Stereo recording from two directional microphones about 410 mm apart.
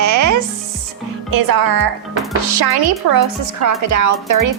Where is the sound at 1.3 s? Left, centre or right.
Right.